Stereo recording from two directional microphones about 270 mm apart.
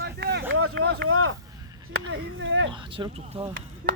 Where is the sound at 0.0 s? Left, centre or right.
Right.